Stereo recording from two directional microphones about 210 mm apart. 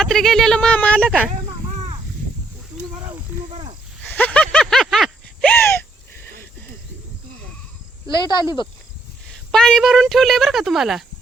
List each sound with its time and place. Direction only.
0.0 s speech: centre (ahead or behind)
4.0 s a sound: 10° left (ahead or behind)
8.0 s speech: 20° left (ahead or behind)
9.5 s speech: 5° left (ahead or behind)